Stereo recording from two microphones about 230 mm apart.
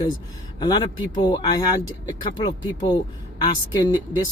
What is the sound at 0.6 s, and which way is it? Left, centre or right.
Speech, centre.